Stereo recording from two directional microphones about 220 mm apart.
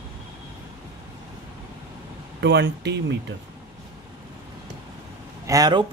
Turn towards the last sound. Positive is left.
turn(degrees=-15)  # may be behind; listen again after turning